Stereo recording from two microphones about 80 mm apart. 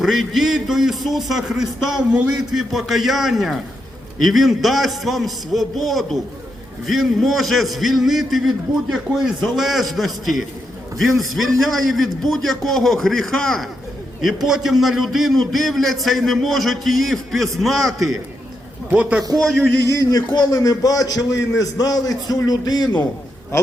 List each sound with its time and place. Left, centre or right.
0.0 s a man's voice: centre
18.9 s a man's voice: centre
19.3 s a man's voice: centre
19.8 s a man's voice: left